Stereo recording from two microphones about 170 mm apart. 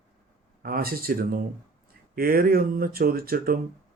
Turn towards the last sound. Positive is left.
turn(degrees=-60)  # may be behind; listen again after turning